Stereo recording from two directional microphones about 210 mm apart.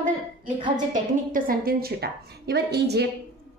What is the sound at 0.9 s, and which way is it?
Speech, 40° right (ahead or behind).